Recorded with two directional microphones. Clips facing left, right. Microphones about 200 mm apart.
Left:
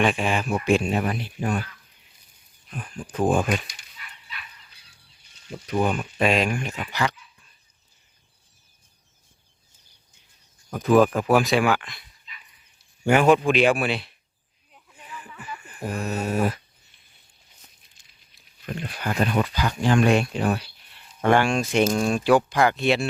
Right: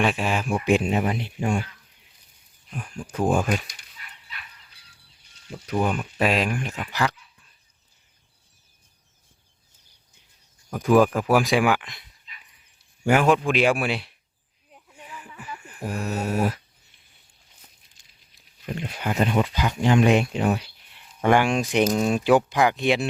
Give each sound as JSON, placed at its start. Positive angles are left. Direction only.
{"t": 0.0, "sound": "speech", "side_deg": -5}
{"t": 0.5, "sound": "speech", "side_deg": -15}
{"t": 2.7, "sound": "speech", "side_deg": -10}
{"t": 5.8, "sound": "speech", "side_deg": -5}
{"t": 11.0, "sound": "speech", "side_deg": -10}
{"t": 13.1, "sound": "speech", "side_deg": 0}
{"t": 15.1, "sound": "a sound", "side_deg": -10}
{"t": 15.9, "sound": "speech", "side_deg": -5}
{"t": 18.6, "sound": "speech", "side_deg": -20}